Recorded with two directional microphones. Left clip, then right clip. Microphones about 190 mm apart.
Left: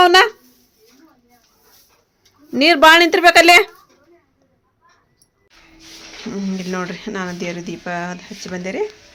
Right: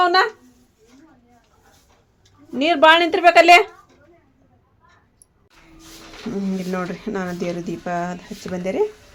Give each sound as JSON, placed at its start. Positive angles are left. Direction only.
{"t": 0.0, "sound": "a sound", "side_deg": 35}
{"t": 2.6, "sound": "a woman's voice", "side_deg": 25}
{"t": 6.3, "sound": "speech", "side_deg": 0}